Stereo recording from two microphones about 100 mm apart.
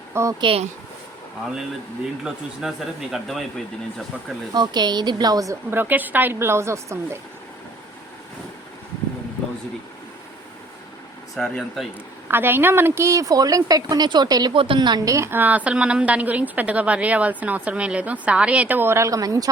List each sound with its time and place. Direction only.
0.1 s speech: 30° right (ahead or behind)
0.3 s speech: 60° right (ahead or behind)
2.2 s speech: 5° right (ahead or behind)
4.5 s a woman's voice: 45° right (ahead or behind)
5.7 s a woman's voice: 20° right (ahead or behind)
11.3 s speech: centre (ahead or behind)
12.3 s speech: 20° right (ahead or behind); by 14.5 s 40° right (ahead or behind)
14.5 s a woman's voice: 60° right (ahead or behind); by 19.5 s 35° right (ahead or behind)